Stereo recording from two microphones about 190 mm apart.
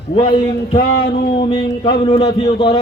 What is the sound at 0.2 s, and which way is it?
A man's voice, 25° left (ahead or behind).